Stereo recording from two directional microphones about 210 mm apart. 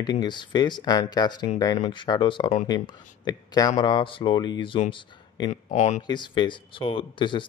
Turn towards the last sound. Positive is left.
turn(degrees=25)  # may be behind; listen again after turning